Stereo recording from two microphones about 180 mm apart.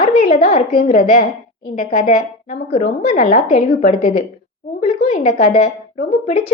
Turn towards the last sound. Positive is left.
turn(degrees=40)  # may be behind; listen again after turning